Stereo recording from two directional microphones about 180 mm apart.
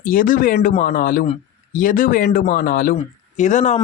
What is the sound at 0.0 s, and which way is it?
Speech, 50° left (ahead or behind).